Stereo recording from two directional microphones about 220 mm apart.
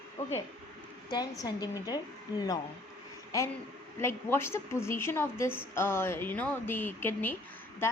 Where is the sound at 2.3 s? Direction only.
10° right (ahead or behind).